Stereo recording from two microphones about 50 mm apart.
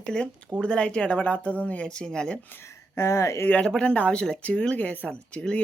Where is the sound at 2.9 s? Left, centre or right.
Left.